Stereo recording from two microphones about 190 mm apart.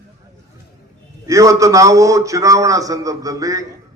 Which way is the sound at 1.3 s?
15° right (ahead or behind).